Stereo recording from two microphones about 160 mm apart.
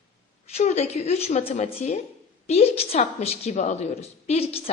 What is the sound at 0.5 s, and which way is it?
A woman's voice, 45° left (ahead or behind).